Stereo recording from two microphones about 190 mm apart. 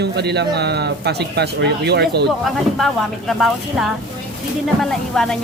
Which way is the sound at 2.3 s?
Centre (ahead or behind).